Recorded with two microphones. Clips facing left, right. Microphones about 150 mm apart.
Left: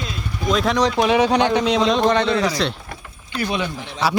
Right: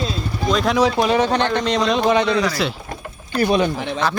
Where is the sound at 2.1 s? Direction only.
15° right (ahead or behind).